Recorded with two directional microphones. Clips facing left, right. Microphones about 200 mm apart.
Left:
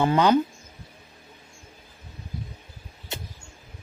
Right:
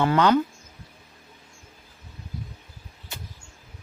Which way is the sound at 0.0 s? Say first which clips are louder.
Even; 15° left (ahead or behind).